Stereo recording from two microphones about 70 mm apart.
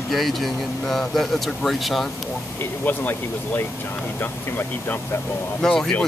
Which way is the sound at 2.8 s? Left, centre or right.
Left.